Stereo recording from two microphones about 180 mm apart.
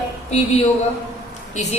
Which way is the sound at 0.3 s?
35° left (ahead or behind).